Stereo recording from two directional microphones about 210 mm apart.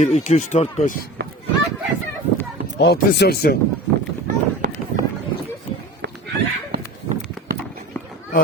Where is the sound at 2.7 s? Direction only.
50° left (ahead or behind).